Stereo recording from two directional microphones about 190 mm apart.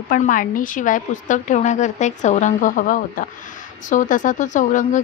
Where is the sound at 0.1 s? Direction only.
45° left (ahead or behind).